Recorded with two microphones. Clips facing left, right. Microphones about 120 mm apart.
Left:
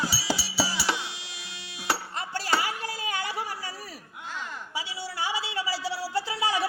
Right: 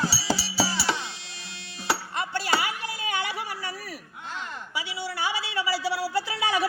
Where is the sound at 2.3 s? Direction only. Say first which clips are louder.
Even; 40° left (ahead or behind).